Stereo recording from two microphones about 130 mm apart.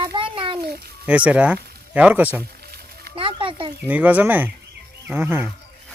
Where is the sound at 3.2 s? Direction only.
40° right (ahead or behind).